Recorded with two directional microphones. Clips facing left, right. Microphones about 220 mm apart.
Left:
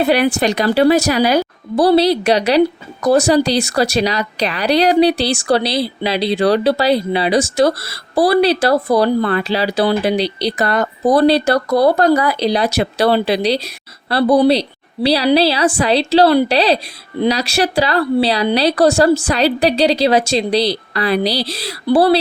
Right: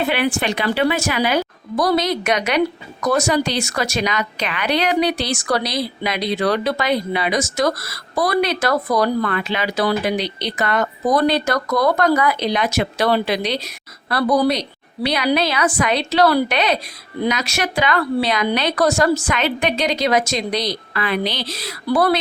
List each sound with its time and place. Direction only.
0.0 s speech: 40° left (ahead or behind)